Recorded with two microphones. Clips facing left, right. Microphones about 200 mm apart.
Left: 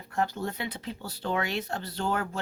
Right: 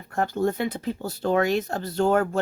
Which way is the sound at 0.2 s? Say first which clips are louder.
Right 7 dB; 50° right (ahead or behind).